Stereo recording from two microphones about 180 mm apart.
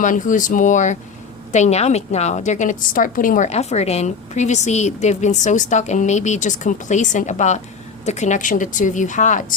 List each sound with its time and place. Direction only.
0.0 s a woman's voice: 45° left (ahead or behind)